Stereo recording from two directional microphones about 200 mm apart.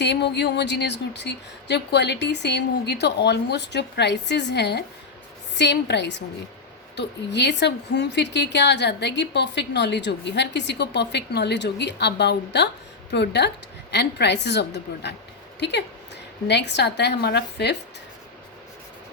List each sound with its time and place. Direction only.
0.0 s a woman's voice: 60° left (ahead or behind)
16.5 s a woman's voice: 60° left (ahead or behind)